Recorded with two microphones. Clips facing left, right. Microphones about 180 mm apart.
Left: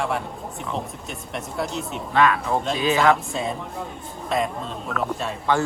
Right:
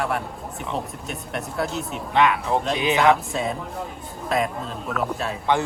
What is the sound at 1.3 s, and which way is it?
Speech, centre (ahead or behind).